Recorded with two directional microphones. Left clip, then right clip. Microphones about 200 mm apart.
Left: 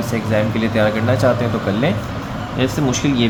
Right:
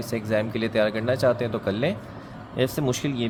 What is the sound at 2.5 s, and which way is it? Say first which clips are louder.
Speech: left 5 dB; 50° right (ahead or behind).